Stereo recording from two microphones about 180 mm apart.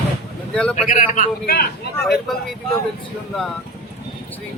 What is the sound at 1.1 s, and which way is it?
Speech, 45° left (ahead or behind).